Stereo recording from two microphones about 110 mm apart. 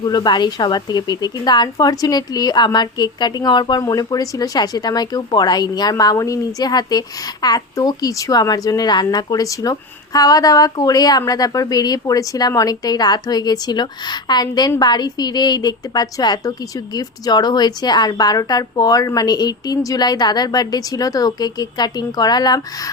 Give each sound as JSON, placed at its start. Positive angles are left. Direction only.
{"t": 0.0, "sound": "speech", "side_deg": 40}